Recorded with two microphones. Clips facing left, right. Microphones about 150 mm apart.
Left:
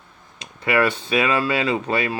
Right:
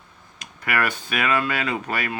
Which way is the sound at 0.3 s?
25° left (ahead or behind).